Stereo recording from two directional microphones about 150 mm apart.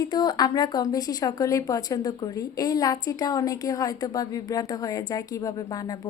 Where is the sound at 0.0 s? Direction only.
30° left (ahead or behind).